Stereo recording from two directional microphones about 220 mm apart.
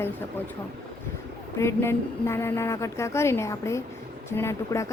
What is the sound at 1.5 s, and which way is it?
Speech, 10° left (ahead or behind).